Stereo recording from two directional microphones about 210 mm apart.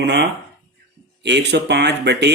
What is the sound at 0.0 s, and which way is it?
Speech, 55° right (ahead or behind).